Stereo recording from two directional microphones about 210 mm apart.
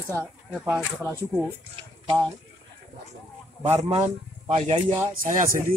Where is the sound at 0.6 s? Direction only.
10° right (ahead or behind).